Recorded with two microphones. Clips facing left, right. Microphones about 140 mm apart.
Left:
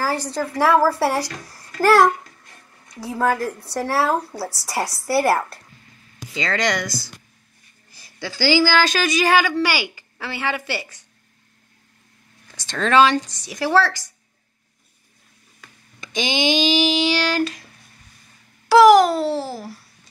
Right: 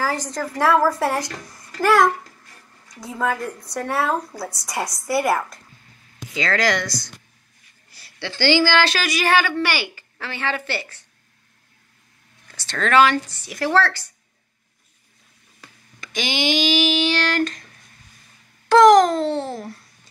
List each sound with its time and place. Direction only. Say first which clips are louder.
0.0 s a child's voice: left 1 dB; 10° left (ahead or behind)
4.8 s a woman's voice: left 2 dB; 30° left (ahead or behind)
5.2 s a child's voice: left 2 dB; 5° left (ahead or behind)
12.4 s speech: left 1 dB; 15° left (ahead or behind)
16.0 s speech: left 2 dB; 20° left (ahead or behind)
18.7 s a child's voice: left 1 dB; 10° left (ahead or behind)